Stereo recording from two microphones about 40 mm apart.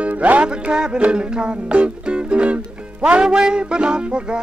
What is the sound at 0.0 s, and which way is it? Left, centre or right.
Music, right.